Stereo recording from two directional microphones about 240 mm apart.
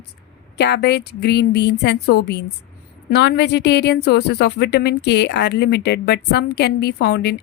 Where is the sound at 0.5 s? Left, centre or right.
Left.